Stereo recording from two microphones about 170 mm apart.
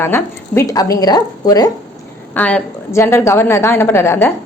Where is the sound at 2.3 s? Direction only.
10° left (ahead or behind).